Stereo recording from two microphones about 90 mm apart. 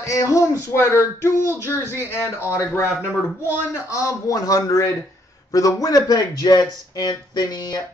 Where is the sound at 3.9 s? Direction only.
40° left (ahead or behind).